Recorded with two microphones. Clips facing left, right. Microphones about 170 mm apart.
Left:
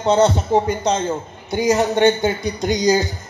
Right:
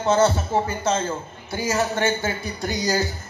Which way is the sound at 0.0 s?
20° left (ahead or behind).